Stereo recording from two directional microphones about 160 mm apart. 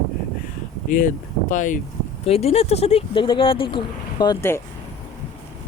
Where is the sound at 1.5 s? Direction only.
55° left (ahead or behind).